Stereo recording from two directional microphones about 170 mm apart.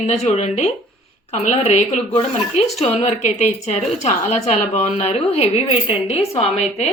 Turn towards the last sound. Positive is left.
turn(degrees=35)  # may be behind; listen again after turning